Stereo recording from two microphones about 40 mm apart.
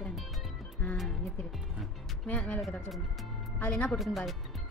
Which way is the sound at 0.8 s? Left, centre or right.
Left.